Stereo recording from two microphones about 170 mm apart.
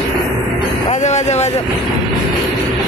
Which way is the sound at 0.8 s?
40° left (ahead or behind).